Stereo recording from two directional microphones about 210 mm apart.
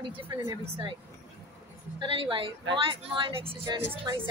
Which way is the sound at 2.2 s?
25° right (ahead or behind).